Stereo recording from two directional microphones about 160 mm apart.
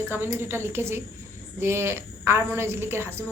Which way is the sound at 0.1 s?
15° right (ahead or behind).